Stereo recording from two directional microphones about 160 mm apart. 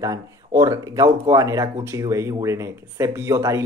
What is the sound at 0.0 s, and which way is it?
A man's voice, 20° right (ahead or behind).